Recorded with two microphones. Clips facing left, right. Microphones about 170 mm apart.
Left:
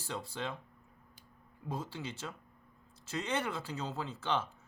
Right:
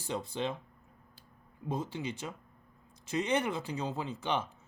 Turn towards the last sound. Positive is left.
turn(degrees=-15)  # may be behind; listen again after turning